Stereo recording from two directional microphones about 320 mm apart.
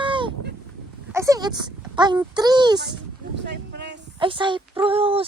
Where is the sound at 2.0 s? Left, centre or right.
Centre.